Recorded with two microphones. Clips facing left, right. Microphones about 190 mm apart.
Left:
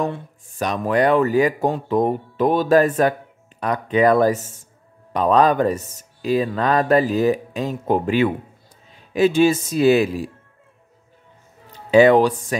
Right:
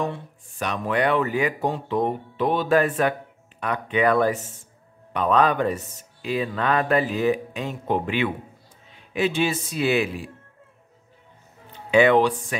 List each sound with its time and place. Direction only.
0.1 s speech: 40° left (ahead or behind)
11.7 s speech: 35° left (ahead or behind)